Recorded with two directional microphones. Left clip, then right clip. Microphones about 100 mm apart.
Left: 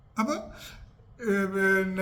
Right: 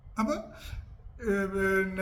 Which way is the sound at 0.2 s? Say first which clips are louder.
Left 2 dB; 20° left (ahead or behind).